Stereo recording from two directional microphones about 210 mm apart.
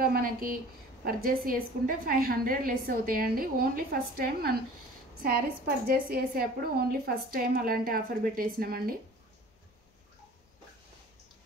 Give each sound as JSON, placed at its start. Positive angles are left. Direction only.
{"t": 0.0, "sound": "a woman's voice", "side_deg": -45}
{"t": 6.0, "sound": "a woman's voice", "side_deg": -45}